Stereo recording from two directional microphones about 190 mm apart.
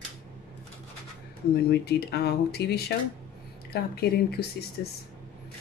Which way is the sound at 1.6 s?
60° left (ahead or behind).